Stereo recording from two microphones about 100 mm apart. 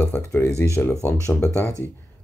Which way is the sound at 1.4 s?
30° left (ahead or behind).